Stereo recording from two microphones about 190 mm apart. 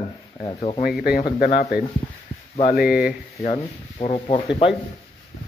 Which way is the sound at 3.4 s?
35° left (ahead or behind).